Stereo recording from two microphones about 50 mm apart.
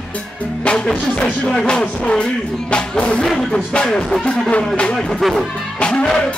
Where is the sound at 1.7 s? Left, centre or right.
Centre.